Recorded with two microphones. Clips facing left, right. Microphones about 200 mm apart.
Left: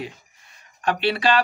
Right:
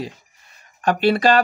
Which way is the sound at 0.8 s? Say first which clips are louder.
Right 5 dB; 40° right (ahead or behind).